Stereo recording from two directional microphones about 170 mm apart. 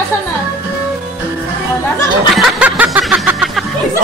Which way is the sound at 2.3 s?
Centre (ahead or behind).